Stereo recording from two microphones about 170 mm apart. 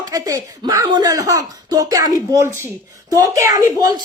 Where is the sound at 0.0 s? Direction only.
20° right (ahead or behind).